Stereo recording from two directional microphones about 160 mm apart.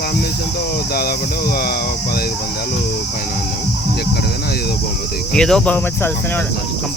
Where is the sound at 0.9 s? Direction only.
70° left (ahead or behind).